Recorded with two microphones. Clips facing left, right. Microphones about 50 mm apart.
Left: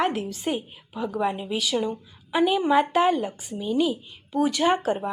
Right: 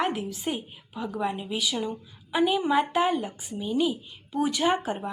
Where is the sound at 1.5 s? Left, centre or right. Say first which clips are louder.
Left 3 dB; centre.